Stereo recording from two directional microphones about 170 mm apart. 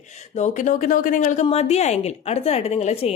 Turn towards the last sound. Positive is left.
turn(degrees=40)  # may be behind; listen again after turning